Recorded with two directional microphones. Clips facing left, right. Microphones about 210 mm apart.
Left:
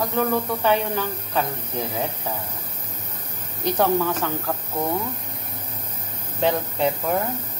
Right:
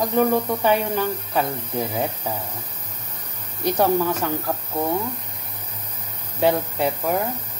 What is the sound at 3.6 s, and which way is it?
Speech, 10° right (ahead or behind).